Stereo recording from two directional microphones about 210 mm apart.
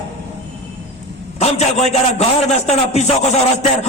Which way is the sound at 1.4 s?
30° left (ahead or behind).